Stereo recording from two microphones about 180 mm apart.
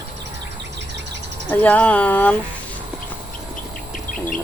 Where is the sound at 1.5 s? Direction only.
10° left (ahead or behind).